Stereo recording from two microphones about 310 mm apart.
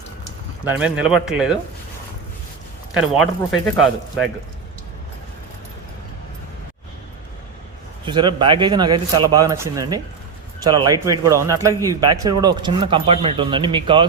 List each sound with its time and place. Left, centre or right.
0.6 s speech: centre
2.9 s speech: centre
8.0 s speech: centre